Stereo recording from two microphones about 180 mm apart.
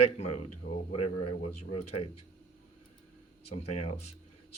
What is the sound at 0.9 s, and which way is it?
Speech, 35° left (ahead or behind).